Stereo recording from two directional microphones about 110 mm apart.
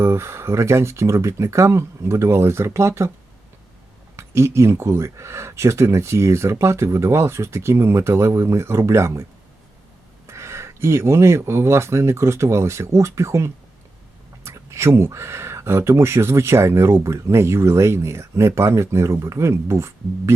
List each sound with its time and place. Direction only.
0.0 s speech: 25° right (ahead or behind)
4.2 s speech: 25° right (ahead or behind)
10.2 s speech: 25° right (ahead or behind)